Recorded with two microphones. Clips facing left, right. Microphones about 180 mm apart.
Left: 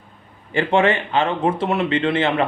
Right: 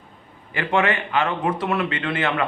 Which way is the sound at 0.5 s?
30° left (ahead or behind).